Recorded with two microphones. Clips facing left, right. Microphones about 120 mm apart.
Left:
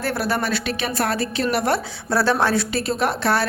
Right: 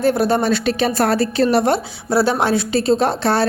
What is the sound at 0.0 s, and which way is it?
A woman's voice, 20° right (ahead or behind).